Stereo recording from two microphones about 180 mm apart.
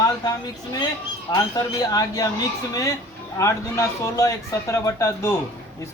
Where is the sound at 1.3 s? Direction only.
20° left (ahead or behind).